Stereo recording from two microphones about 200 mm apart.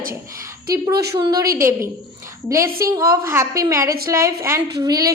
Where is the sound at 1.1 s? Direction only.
20° right (ahead or behind).